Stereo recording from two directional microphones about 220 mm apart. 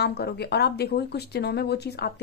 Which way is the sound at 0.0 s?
50° left (ahead or behind).